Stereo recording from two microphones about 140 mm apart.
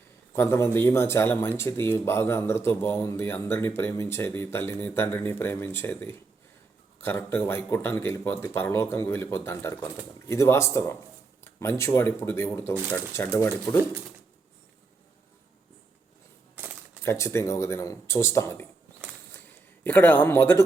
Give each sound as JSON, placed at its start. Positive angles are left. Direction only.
{"t": 0.3, "sound": "speech", "side_deg": 20}
{"t": 17.0, "sound": "speech", "side_deg": 20}
{"t": 19.8, "sound": "speech", "side_deg": 15}